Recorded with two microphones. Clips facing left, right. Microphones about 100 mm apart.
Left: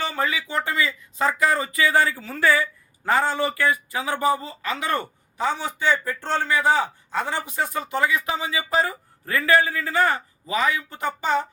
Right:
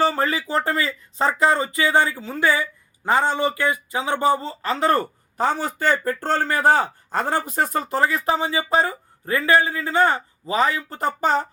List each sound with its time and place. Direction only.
0.0 s speech: 40° right (ahead or behind)